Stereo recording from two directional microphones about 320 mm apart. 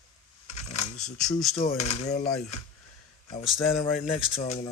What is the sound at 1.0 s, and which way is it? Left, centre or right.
Speech, centre.